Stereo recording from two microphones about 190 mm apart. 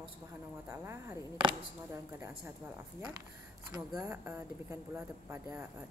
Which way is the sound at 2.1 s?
15° right (ahead or behind).